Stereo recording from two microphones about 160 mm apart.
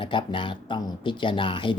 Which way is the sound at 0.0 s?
30° left (ahead or behind).